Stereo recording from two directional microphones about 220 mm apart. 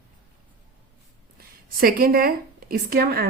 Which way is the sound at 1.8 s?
40° right (ahead or behind).